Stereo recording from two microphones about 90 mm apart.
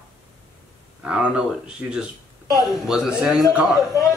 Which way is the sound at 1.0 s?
10° right (ahead or behind).